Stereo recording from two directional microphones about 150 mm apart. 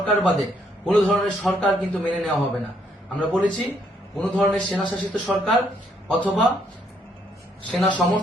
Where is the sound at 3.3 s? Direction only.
10° left (ahead or behind).